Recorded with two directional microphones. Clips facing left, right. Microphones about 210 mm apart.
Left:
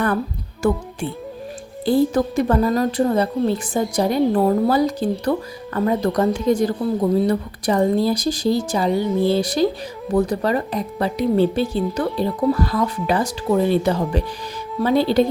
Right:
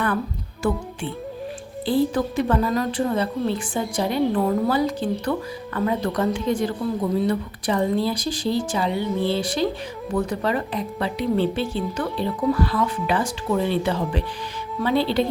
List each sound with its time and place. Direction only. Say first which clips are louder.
1.8 s a woman's voice: left 4 dB; 45° left (ahead or behind)